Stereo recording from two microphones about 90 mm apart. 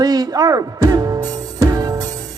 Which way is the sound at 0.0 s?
45° right (ahead or behind).